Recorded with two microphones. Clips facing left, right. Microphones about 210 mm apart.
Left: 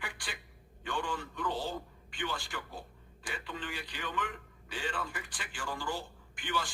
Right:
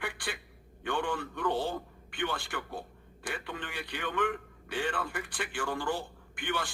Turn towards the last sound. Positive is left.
turn(degrees=-60)  # may be behind; listen again after turning